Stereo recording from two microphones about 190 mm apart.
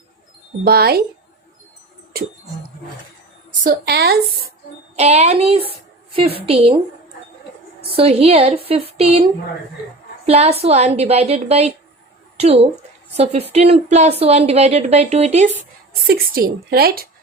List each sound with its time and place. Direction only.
0.6 s a woman's voice: 55° right (ahead or behind)
3.6 s a woman's voice: 50° right (ahead or behind)
4.9 s a woman's voice: 35° right (ahead or behind)
7.8 s a woman's voice: 30° right (ahead or behind)
10.2 s a woman's voice: 35° right (ahead or behind)
16.0 s a woman's voice: 50° right (ahead or behind)